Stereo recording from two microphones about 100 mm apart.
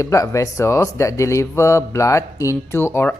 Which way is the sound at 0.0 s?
30° left (ahead or behind).